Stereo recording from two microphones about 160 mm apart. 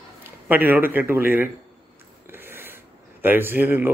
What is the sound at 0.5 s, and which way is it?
A man's voice, 10° right (ahead or behind).